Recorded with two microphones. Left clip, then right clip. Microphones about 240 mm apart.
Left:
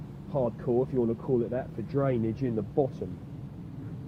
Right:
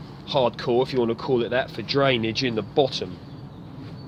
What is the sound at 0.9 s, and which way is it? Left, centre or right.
Speech, centre.